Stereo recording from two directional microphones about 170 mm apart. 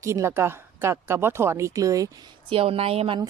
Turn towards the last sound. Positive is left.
turn(degrees=-35)  # may be behind; listen again after turning